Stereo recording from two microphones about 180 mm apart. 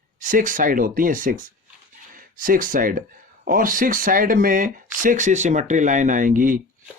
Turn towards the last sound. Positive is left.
turn(degrees=-50)  # may be behind; listen again after turning